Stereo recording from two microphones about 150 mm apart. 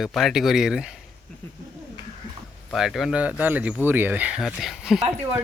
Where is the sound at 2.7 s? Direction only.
Centre (ahead or behind).